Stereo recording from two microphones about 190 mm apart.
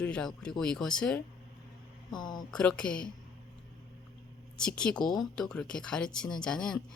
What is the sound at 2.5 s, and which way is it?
Speech, 5° left (ahead or behind).